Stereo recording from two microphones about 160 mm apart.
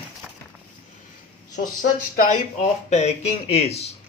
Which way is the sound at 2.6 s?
45° left (ahead or behind).